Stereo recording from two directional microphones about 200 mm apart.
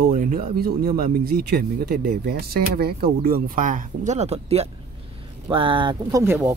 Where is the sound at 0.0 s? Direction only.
40° right (ahead or behind); by 6.2 s 25° right (ahead or behind).